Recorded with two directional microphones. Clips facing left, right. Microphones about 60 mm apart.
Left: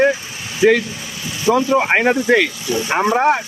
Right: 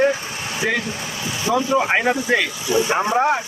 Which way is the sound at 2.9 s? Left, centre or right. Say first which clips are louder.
Left 6 dB; left.